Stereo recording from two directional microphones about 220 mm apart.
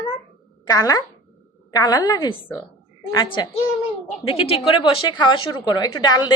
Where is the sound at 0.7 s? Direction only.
15° left (ahead or behind).